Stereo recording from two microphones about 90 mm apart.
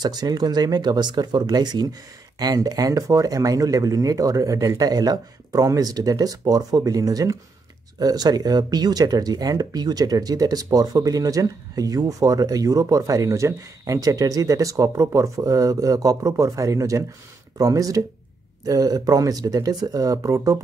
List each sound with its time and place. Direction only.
0.0 s speech: 50° right (ahead or behind)